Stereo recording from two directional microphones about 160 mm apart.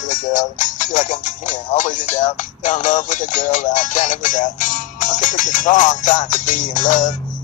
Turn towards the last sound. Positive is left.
turn(degrees=55)  # may be behind; listen again after turning